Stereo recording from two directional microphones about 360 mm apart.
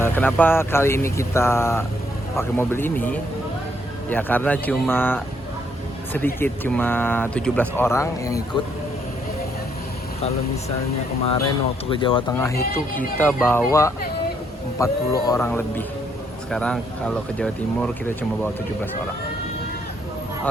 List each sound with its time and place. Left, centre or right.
0.0 s speech: centre
11.3 s speech: centre
12.5 s speech: left
13.1 s speech: centre